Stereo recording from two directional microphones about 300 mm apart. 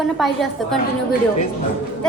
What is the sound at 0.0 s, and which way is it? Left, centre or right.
Speech, centre.